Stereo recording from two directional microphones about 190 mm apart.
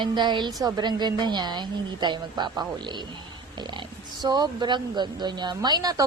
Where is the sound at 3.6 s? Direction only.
25° right (ahead or behind).